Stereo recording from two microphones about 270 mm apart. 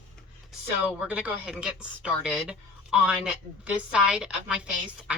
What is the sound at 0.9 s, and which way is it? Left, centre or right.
A woman's voice, centre.